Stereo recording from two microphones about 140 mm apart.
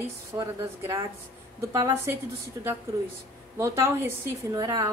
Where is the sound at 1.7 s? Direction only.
25° right (ahead or behind).